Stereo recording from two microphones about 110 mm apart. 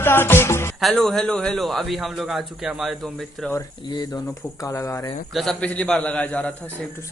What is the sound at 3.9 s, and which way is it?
Speech, 30° left (ahead or behind).